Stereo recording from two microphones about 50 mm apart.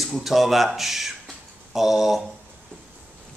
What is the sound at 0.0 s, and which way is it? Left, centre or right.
A man's voice, centre.